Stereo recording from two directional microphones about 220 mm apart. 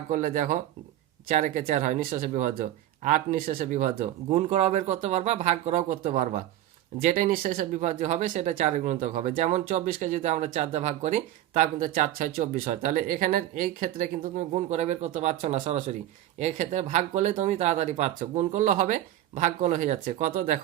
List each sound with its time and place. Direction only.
0.1 s speech: 40° right (ahead or behind)